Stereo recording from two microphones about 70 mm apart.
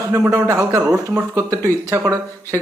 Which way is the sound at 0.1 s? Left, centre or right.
Right.